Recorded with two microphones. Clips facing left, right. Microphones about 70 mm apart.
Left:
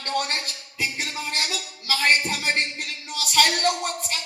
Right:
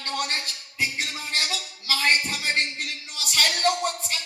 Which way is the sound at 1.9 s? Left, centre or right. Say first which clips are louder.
Left 2 dB; left.